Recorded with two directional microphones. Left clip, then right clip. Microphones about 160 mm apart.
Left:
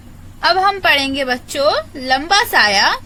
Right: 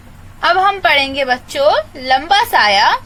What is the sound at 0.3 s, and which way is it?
A woman's voice, 15° left (ahead or behind).